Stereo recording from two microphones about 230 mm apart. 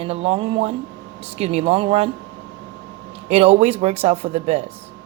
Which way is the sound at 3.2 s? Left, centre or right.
Right.